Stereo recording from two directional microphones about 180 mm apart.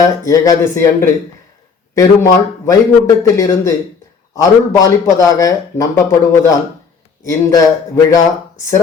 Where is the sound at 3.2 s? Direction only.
15° left (ahead or behind).